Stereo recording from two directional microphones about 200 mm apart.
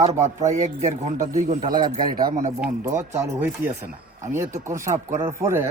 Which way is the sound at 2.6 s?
15° right (ahead or behind).